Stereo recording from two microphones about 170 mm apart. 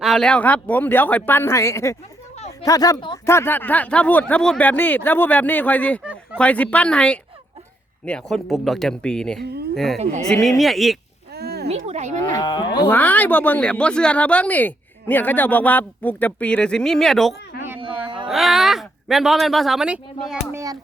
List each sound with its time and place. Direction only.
0.0 s speech: centre (ahead or behind); by 3.3 s 25° left (ahead or behind)
3.3 s speech: 10° left (ahead or behind)
9.4 s speech: 75° right (ahead or behind)
9.7 s speech: centre (ahead or behind)
11.3 s a sound: 70° right (ahead or behind)
11.7 s speech: 40° right (ahead or behind)
12.4 s speech: 25° left (ahead or behind)
12.9 s speech: 10° left (ahead or behind); by 20.6 s 5° right (ahead or behind)